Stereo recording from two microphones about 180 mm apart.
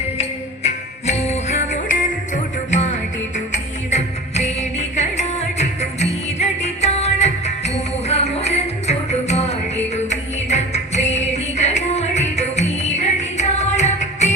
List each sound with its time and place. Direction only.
0.2 s jingle bell: 35° left (ahead or behind)
3.3 s music: 40° left (ahead or behind)